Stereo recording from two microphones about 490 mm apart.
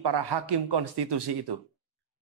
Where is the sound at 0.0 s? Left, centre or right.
Right.